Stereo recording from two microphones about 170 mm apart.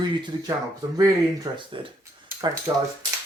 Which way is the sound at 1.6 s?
30° right (ahead or behind).